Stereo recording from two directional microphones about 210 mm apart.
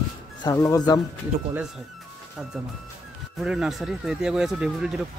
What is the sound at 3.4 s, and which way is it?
Speech, centre (ahead or behind).